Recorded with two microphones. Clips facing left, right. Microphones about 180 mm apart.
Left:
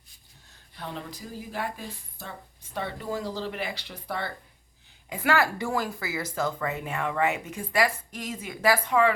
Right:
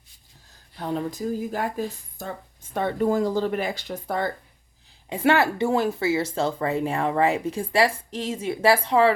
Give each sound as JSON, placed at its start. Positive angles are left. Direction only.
{"t": 0.8, "sound": "speech", "side_deg": -40}
{"t": 5.0, "sound": "speech", "side_deg": -25}